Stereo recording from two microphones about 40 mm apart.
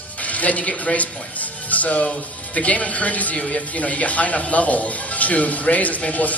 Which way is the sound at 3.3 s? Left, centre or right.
Left.